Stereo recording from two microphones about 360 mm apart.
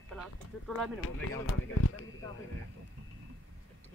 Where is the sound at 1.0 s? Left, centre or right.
Left.